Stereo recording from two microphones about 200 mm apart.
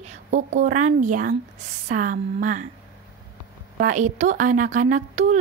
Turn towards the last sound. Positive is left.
turn(degrees=-35)  # may be behind; listen again after turning